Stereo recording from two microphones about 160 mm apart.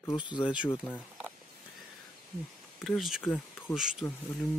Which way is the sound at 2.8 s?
Centre (ahead or behind).